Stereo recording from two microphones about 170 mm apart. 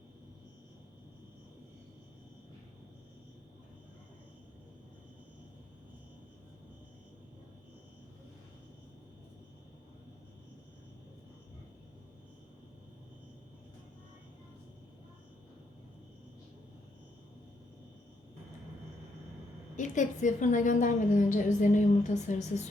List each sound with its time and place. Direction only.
19.7 s a woman's voice: 45° left (ahead or behind)